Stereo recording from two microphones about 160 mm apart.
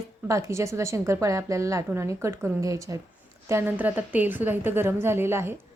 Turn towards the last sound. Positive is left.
turn(degrees=-15)  # may be behind; listen again after turning